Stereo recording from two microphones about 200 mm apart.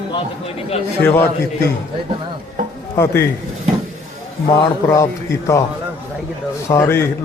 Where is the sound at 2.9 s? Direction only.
10° left (ahead or behind).